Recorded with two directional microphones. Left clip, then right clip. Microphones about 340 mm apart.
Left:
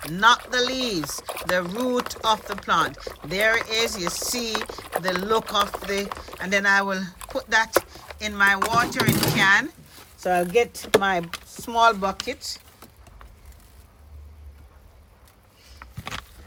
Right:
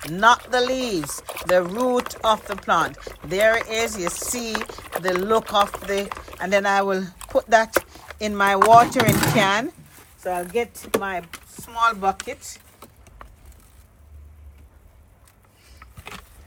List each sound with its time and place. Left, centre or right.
0.0 s speech: centre
10.8 s speech: centre
11.6 s speech: centre